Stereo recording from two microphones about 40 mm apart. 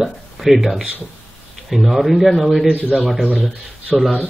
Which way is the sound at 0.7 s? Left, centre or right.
Centre.